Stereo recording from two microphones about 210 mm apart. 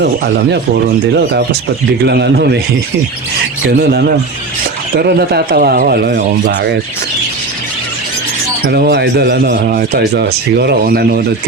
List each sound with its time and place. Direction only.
2.0 s a man's voice: 50° right (ahead or behind)
3.6 s a man's voice: 50° right (ahead or behind)
8.7 s a man's voice: 50° right (ahead or behind)